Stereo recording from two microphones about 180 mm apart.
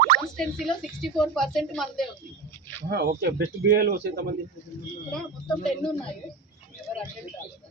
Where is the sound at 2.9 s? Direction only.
65° right (ahead or behind).